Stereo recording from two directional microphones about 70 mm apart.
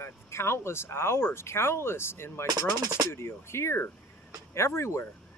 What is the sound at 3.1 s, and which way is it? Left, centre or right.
Speech, left.